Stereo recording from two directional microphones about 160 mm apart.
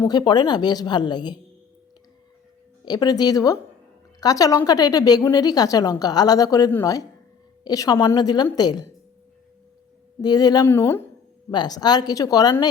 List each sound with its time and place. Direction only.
0.0 s a woman's voice: 25° left (ahead or behind)
2.8 s a woman's voice: 25° left (ahead or behind)
10.2 s a woman's voice: 25° left (ahead or behind)
11.5 s a woman's voice: 25° left (ahead or behind)